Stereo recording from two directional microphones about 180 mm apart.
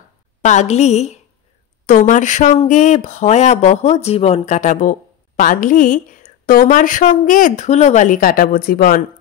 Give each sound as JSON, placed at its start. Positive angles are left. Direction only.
{"t": 0.4, "sound": "a woman's voice", "side_deg": 40}